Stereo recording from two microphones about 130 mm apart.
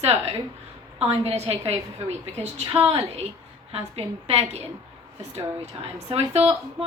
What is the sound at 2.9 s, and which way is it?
A woman's voice, 50° right (ahead or behind).